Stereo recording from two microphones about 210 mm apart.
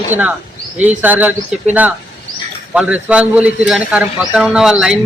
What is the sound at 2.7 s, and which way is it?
A man's voice, 5° right (ahead or behind).